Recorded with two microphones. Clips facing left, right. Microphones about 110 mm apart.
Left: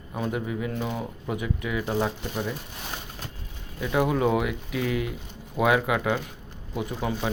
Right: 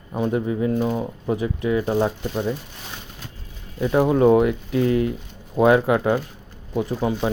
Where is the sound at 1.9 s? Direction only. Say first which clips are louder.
Right 3 dB; 15° right (ahead or behind).